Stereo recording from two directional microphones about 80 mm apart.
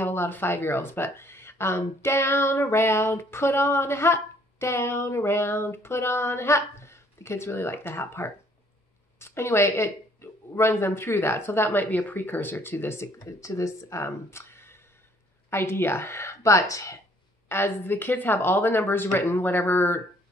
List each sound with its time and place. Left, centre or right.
0.0 s speech: left
13.2 s speech: left
17.5 s speech: left